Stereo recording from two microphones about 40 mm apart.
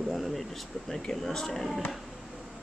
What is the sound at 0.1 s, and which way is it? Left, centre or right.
Air conditioning, centre.